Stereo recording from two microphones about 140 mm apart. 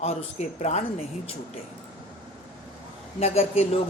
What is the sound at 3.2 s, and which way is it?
Speech, 45° left (ahead or behind).